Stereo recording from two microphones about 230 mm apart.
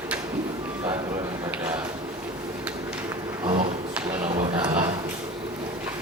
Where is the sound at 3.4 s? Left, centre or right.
Right.